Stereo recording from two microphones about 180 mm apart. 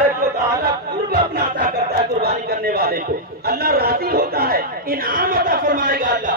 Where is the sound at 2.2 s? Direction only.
60° right (ahead or behind).